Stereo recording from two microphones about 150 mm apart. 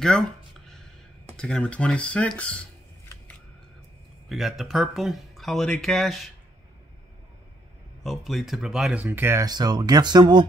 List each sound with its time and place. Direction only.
1.3 s speech: 5° left (ahead or behind)
4.3 s speech: centre (ahead or behind)
8.0 s speech: centre (ahead or behind); by 10.4 s 30° right (ahead or behind)